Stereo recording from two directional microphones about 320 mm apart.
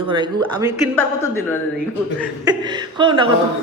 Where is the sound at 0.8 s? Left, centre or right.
Centre.